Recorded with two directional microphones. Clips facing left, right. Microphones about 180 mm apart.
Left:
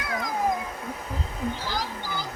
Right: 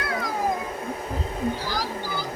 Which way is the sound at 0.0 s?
15° left (ahead or behind).